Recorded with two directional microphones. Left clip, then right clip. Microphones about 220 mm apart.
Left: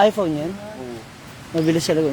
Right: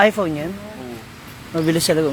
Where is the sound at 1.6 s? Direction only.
5° left (ahead or behind).